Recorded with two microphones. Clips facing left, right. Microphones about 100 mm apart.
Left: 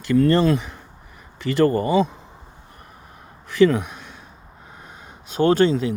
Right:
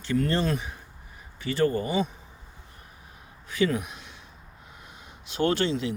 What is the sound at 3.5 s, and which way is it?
Speech, 75° left (ahead or behind).